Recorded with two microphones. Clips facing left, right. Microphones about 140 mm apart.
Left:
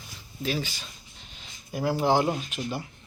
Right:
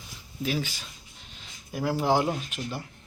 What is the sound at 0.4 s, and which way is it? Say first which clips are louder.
Speech: even; 5° right (ahead or behind).